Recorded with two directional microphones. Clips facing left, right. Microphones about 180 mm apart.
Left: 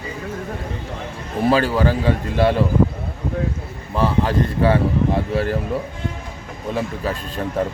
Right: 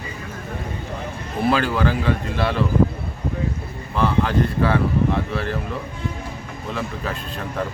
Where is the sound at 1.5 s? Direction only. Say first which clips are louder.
Left 3 dB; 35° left (ahead or behind).